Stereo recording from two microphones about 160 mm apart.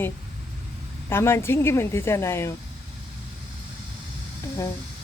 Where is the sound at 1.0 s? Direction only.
15° left (ahead or behind).